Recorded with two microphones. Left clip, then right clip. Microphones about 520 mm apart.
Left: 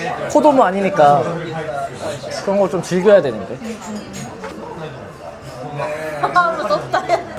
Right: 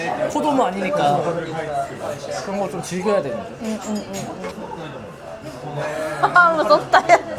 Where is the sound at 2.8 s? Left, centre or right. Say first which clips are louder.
Left 10 dB; left.